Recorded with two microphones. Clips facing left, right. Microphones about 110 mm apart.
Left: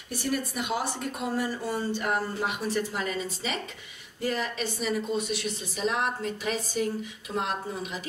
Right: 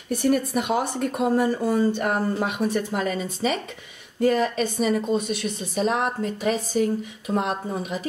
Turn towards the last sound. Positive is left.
turn(degrees=-45)  # may be behind; listen again after turning